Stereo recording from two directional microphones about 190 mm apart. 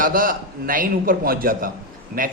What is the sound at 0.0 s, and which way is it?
A man's voice, 45° right (ahead or behind).